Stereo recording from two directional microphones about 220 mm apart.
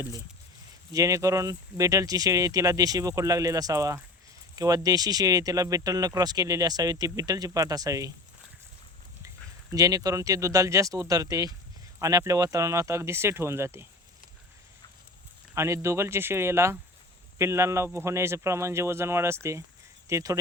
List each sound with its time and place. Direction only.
0.9 s speech: 15° right (ahead or behind)
9.7 s speech: 15° right (ahead or behind)
15.5 s speech: 15° right (ahead or behind)